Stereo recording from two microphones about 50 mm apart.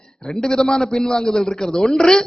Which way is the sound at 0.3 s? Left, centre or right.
Centre.